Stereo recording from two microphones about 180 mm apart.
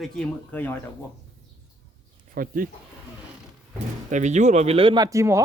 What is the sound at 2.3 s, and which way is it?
Speech, 50° right (ahead or behind).